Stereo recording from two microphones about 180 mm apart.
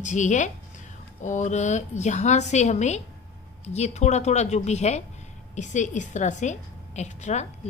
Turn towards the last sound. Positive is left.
turn(degrees=40)  # may be behind; listen again after turning